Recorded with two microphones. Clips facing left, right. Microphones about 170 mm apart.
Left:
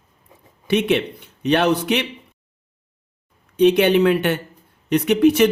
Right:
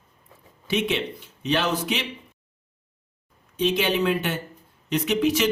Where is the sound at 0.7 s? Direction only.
60° left (ahead or behind).